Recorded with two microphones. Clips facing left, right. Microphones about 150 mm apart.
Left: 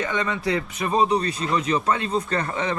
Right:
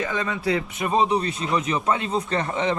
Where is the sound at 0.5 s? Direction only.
20° right (ahead or behind).